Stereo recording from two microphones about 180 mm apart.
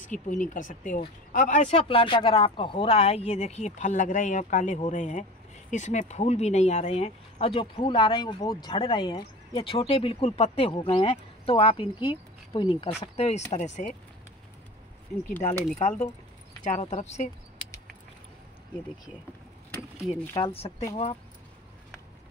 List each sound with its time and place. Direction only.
0.0 s speech: 45° left (ahead or behind)
15.4 s speech: 45° left (ahead or behind)
20.3 s speech: 30° left (ahead or behind)